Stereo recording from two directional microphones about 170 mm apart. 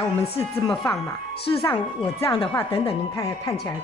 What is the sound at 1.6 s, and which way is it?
Speech, 15° left (ahead or behind).